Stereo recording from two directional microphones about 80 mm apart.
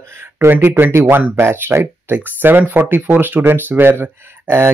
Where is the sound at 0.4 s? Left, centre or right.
Right.